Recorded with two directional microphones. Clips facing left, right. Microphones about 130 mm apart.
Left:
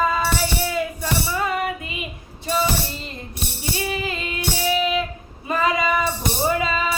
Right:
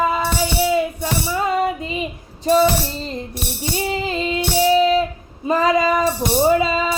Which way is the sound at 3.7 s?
25° right (ahead or behind).